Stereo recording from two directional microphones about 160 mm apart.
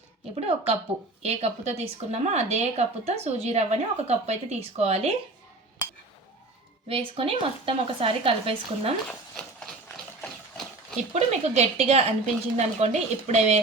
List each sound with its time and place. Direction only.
0.3 s speech: 40° right (ahead or behind)
6.8 s speech: 35° right (ahead or behind)
11.1 s a woman's voice: 45° right (ahead or behind)